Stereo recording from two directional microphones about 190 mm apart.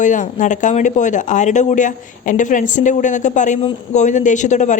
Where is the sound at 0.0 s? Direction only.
40° left (ahead or behind).